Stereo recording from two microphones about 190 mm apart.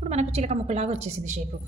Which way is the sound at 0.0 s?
35° right (ahead or behind).